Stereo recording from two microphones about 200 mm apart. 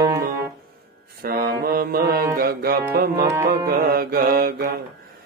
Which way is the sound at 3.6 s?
50° right (ahead or behind).